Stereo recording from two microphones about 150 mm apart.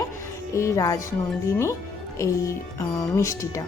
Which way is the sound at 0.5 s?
20° left (ahead or behind).